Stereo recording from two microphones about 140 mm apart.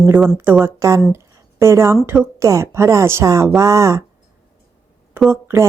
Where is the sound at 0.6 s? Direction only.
20° right (ahead or behind).